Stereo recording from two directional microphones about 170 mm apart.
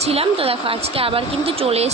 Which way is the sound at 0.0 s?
35° right (ahead or behind).